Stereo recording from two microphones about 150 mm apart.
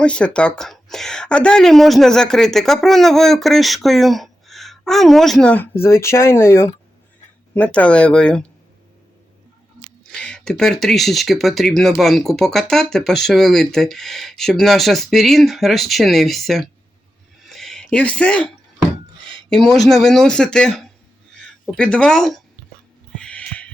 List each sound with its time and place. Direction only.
0.0 s speech: 5° left (ahead or behind)
5.8 s speech: 15° left (ahead or behind)
10.1 s speech: 5° left (ahead or behind)
17.5 s a sound: centre (ahead or behind)
19.5 s speech: 5° left (ahead or behind)
23.1 s a sound: 5° left (ahead or behind)